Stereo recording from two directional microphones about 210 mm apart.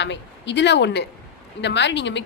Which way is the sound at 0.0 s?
55° left (ahead or behind).